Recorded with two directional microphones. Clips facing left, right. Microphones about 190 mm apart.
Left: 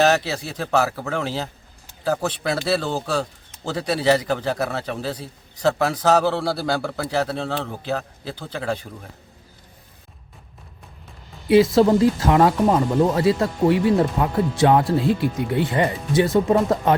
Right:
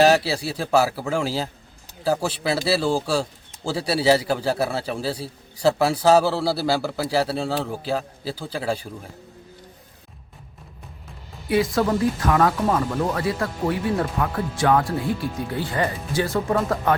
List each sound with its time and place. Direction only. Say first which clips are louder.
0.0 s a man's voice: right 2 dB; 10° right (ahead or behind)
11.4 s speech: left 6 dB; 25° left (ahead or behind)